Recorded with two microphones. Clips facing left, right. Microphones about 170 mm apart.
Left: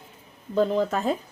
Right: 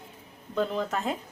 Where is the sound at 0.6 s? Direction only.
35° left (ahead or behind).